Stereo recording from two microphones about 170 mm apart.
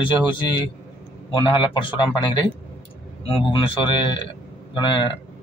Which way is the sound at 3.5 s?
30° left (ahead or behind).